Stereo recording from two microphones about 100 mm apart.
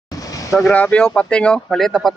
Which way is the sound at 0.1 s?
35° left (ahead or behind).